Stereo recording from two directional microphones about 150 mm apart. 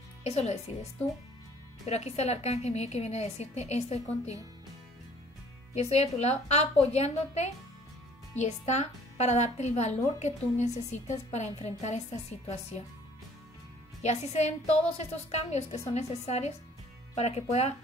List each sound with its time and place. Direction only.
0.2 s speech: 45° left (ahead or behind)
1.9 s a woman's voice: 45° left (ahead or behind)
5.8 s a woman's voice: 45° left (ahead or behind)
14.0 s a woman's voice: 50° left (ahead or behind)